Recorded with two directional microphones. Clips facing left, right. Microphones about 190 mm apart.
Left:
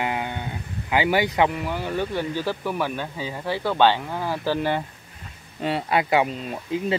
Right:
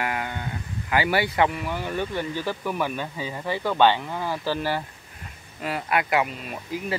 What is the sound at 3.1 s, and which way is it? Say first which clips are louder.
Speech: left 1 dB; 5° left (ahead or behind).